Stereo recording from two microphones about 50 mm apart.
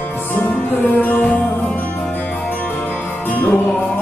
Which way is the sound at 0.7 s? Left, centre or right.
Left.